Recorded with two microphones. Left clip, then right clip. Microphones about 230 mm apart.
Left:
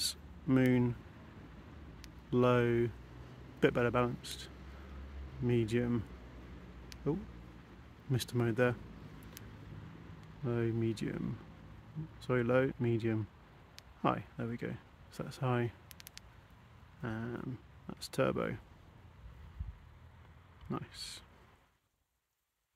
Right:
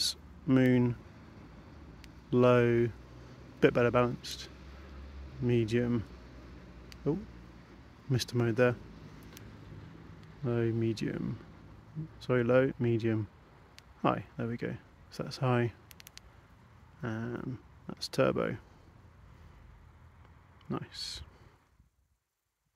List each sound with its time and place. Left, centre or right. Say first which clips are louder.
0.0 s a sound: right 5 dB; centre
2.3 s speech: right 5 dB; centre
7.0 s speech: right 3 dB; centre
10.4 s speech: right 4 dB; centre
15.9 s a sound: right 1 dB; centre
17.0 s speech: right 3 dB; centre
20.7 s speech: right 4 dB; centre